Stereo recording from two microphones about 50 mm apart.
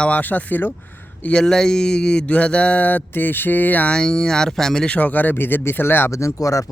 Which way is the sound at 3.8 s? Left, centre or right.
Centre.